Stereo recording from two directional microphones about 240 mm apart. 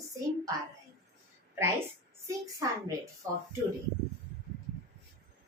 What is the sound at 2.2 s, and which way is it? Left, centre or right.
Speech, centre.